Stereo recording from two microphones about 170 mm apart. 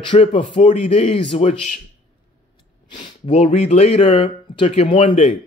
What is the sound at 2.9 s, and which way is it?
Speech, 30° left (ahead or behind).